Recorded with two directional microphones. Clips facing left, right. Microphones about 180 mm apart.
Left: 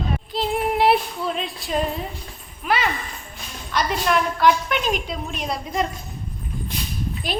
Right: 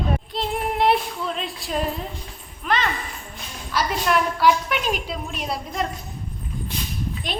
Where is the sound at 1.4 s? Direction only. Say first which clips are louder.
Left 2 dB; centre (ahead or behind).